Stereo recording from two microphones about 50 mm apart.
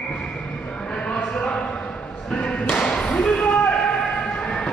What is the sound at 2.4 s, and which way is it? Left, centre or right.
Thump, left.